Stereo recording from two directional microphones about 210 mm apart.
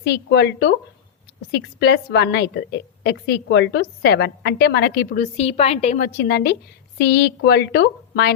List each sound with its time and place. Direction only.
0.0 s a woman's voice: 50° left (ahead or behind)